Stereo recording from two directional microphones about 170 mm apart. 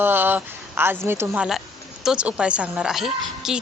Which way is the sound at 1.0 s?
15° right (ahead or behind).